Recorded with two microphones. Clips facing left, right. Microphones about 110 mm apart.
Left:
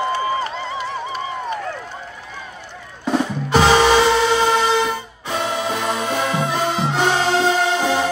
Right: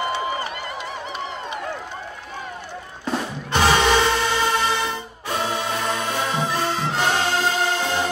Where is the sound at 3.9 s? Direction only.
5° left (ahead or behind).